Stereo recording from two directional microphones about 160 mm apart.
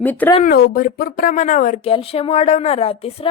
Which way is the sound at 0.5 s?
80° left.